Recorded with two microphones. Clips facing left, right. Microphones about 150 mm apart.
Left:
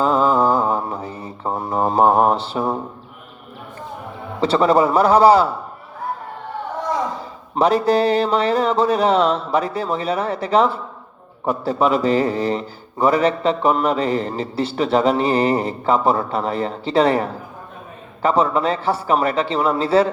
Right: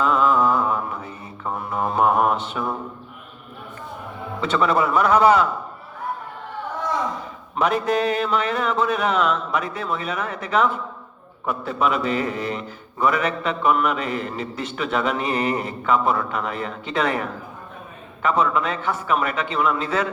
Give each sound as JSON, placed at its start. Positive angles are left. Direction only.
{"t": 0.0, "sound": "mantra", "side_deg": 35}
{"t": 4.4, "sound": "a man's voice", "side_deg": 35}
{"t": 7.5, "sound": "a man's voice", "side_deg": 35}